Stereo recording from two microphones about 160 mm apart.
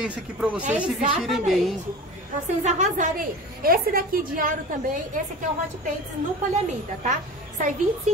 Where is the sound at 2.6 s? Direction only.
50° right (ahead or behind).